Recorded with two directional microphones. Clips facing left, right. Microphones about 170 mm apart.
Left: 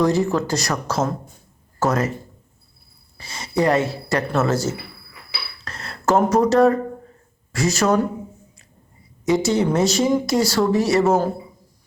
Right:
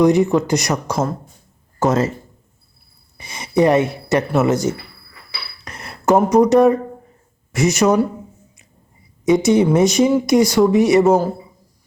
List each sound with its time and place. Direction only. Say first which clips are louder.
0.0 s speech: right 5 dB; 20° right (ahead or behind)
1.8 s speech: right 4 dB; 25° right (ahead or behind)
3.2 s speech: right 5 dB; 20° right (ahead or behind)
5.6 s a sound: right 4 dB; 15° right (ahead or behind)
6.3 s speech: right 4 dB; 20° right (ahead or behind)
9.2 s speech: right 5 dB; 20° right (ahead or behind)